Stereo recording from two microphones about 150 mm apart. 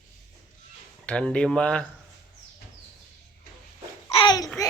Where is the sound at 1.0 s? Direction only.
5° left (ahead or behind).